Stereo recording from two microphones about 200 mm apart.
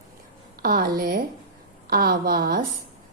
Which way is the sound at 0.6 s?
45° right (ahead or behind).